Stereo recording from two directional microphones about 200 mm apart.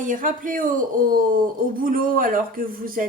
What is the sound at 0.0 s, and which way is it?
A woman's voice, 40° right (ahead or behind).